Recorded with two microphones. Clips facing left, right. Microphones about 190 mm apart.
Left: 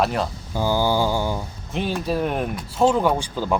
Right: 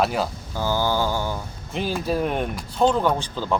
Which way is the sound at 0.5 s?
15° left (ahead or behind).